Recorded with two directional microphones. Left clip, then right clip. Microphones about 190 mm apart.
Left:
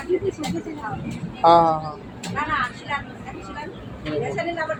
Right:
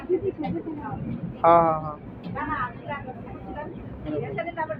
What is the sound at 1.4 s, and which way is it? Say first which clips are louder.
Speech: left 3 dB; 20° left (ahead or behind).